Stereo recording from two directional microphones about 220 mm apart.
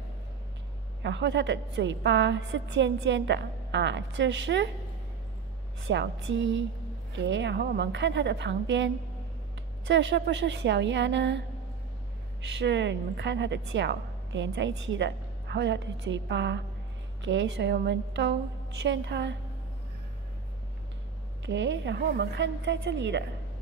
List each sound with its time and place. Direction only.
1.0 s a woman's voice: 55° right (ahead or behind)
5.8 s a woman's voice: 55° right (ahead or behind)
12.5 s a woman's voice: 55° right (ahead or behind)
21.5 s a woman's voice: 55° right (ahead or behind)